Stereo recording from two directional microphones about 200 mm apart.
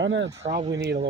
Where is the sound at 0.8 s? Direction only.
55° right (ahead or behind).